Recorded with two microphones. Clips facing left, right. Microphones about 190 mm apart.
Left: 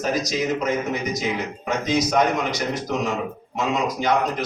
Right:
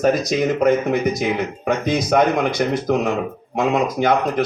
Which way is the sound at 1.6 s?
55° right (ahead or behind).